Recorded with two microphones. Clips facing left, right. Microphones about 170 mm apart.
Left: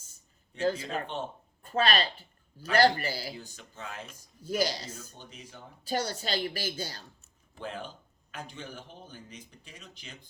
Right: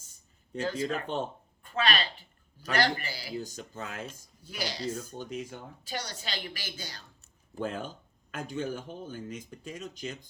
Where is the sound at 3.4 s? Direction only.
40° right (ahead or behind).